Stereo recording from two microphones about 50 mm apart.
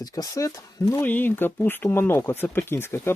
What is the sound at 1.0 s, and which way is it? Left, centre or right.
Speech, left.